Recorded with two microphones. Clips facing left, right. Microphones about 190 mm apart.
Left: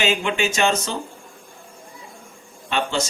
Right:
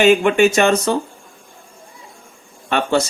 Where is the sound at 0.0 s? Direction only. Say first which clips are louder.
Right 10 dB; 55° right (ahead or behind).